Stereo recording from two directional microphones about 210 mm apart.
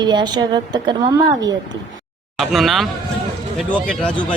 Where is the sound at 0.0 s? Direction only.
20° right (ahead or behind).